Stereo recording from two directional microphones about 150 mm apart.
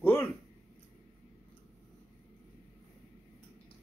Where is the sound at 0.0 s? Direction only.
15° left (ahead or behind).